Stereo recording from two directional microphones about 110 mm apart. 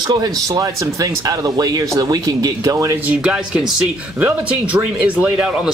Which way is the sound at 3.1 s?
10° right (ahead or behind).